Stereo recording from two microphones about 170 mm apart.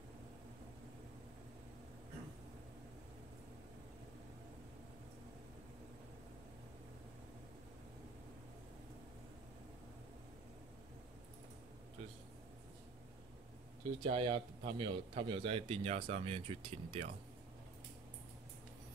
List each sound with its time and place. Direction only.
14.0 s a man's voice: 30° right (ahead or behind)